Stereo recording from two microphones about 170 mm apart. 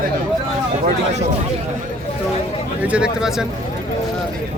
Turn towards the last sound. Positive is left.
turn(degrees=-5)  # may be behind; listen again after turning